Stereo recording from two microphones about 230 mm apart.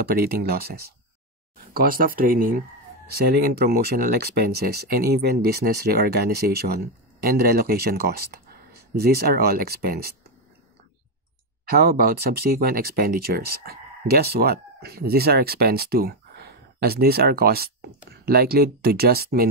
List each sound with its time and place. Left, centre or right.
0.1 s speech: right
1.7 s speech: right
11.7 s speech: right